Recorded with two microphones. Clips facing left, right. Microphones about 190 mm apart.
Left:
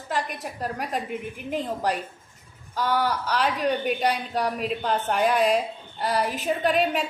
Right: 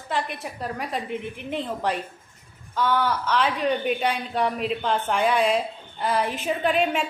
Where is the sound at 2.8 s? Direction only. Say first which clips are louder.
Right 1 dB; 40° left (ahead or behind).